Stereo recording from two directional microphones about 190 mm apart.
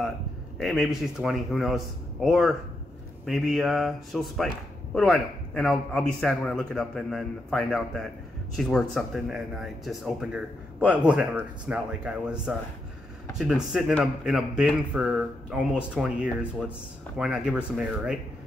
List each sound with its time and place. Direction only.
0.6 s speech: centre (ahead or behind)